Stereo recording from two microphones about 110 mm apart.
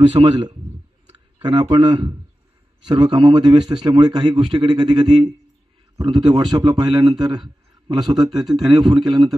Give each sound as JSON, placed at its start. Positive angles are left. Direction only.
{"t": 0.2, "sound": "a man's voice", "side_deg": -45}